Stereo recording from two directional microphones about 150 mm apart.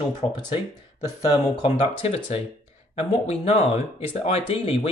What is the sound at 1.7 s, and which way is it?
Speech, 40° left (ahead or behind).